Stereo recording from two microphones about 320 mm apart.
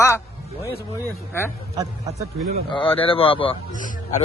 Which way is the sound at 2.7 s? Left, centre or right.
Centre.